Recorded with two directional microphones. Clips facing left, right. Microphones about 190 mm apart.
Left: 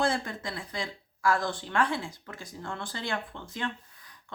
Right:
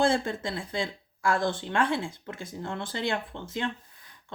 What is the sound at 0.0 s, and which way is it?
Speech, 25° right (ahead or behind).